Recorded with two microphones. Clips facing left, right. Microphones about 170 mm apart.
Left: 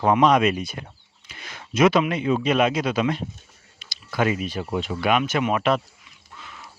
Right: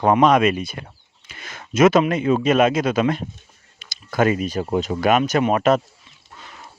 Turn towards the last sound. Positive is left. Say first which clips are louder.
# right 4 dB
turn(degrees=-45)  # may be behind; listen again after turning